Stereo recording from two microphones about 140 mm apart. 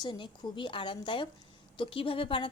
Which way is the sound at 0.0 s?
30° left (ahead or behind).